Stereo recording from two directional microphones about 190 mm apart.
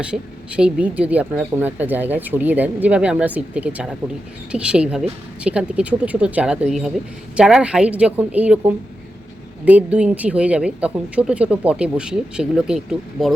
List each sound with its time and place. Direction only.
0.0 s speech: 5° right (ahead or behind)